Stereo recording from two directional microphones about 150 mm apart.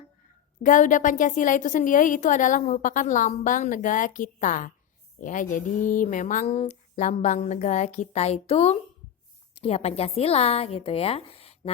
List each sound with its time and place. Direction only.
0.6 s a woman's voice: 60° left (ahead or behind); by 11.7 s 40° left (ahead or behind)